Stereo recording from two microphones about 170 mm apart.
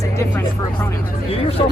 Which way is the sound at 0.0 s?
15° left (ahead or behind).